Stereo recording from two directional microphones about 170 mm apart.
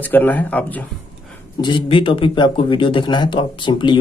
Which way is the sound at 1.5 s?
30° left (ahead or behind).